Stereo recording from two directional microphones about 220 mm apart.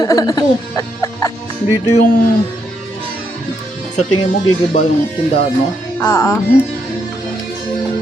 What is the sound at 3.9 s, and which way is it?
Speech, 35° left (ahead or behind).